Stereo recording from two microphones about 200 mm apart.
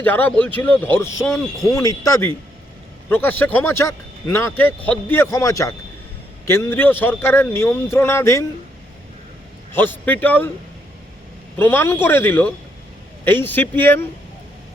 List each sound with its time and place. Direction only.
0.0 s speech: 10° left (ahead or behind)
9.7 s speech: 10° left (ahead or behind)
11.5 s speech: 10° left (ahead or behind)